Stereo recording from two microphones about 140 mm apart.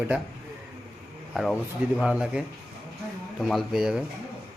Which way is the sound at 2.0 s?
5° right (ahead or behind).